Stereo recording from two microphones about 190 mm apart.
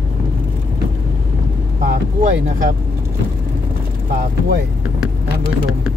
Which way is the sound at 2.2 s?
45° right (ahead or behind).